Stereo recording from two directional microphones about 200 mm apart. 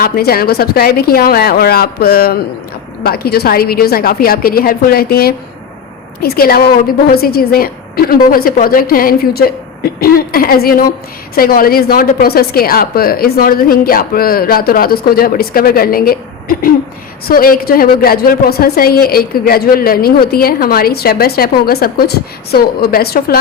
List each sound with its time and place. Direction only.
0.0 s a woman's voice: 50° left (ahead or behind)